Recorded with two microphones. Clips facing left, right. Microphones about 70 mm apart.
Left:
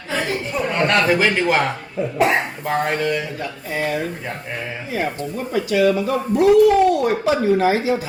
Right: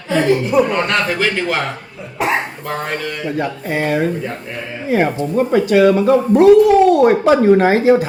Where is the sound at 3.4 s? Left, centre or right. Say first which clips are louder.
Right 6 dB; right.